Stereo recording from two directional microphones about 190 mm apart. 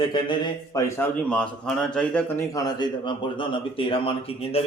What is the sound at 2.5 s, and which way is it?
A man's voice, 20° left (ahead or behind).